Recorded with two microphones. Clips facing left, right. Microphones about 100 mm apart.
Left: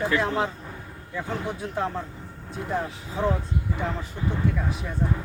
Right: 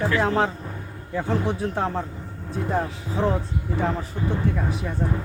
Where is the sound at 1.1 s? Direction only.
30° right (ahead or behind).